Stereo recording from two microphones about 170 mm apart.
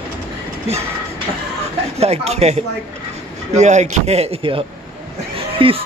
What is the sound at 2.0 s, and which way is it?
Speech, 40° right (ahead or behind).